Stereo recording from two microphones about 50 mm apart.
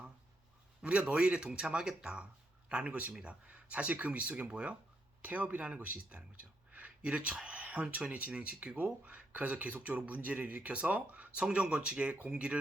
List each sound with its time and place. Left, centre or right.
0.8 s speech: right
5.2 s speech: right